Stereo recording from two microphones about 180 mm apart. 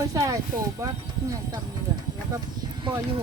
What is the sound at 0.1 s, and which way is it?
Speech, 20° right (ahead or behind).